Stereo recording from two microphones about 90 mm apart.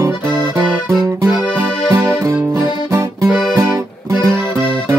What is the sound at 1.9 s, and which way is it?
Music, 40° right (ahead or behind).